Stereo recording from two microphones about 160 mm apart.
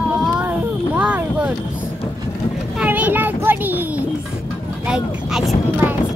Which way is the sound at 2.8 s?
10° right (ahead or behind).